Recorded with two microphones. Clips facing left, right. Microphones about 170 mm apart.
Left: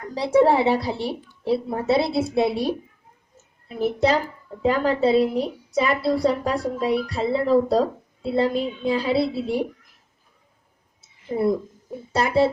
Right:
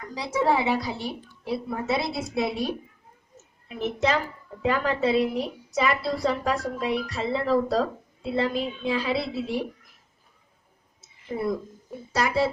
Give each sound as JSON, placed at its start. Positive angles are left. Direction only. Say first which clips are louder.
{"t": 0.1, "sound": "a woman's voice", "louder": "left 7 dB", "side_deg": 30}
{"t": 11.3, "sound": "speech", "louder": "left 6 dB", "side_deg": 30}